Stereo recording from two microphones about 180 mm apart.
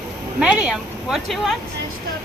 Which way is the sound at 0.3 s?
5° right (ahead or behind).